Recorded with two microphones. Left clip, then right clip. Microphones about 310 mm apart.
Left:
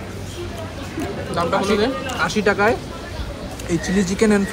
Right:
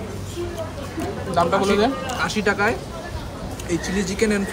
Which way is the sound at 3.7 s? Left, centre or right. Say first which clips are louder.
Left 3 dB; centre.